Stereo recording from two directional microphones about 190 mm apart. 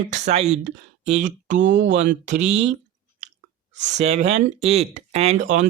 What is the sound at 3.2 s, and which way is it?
Chewing, 40° right (ahead or behind).